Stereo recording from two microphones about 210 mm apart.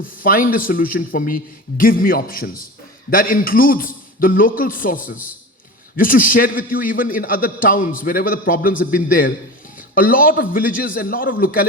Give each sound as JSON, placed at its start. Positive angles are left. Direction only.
{"t": 0.0, "sound": "a man's voice", "side_deg": 40}